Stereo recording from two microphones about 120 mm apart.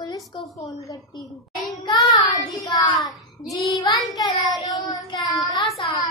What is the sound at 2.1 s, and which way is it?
Child singing, 30° left (ahead or behind).